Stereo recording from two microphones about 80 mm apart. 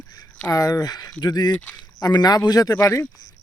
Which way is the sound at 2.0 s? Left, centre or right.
Left.